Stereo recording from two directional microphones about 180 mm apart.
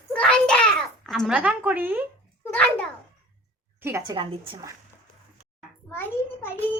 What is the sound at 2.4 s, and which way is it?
Speech, 5° left (ahead or behind).